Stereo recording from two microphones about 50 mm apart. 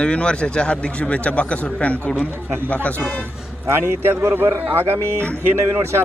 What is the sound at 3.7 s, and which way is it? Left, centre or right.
Speech, right.